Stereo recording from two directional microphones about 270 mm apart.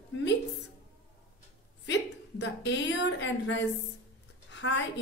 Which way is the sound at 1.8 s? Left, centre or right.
Left.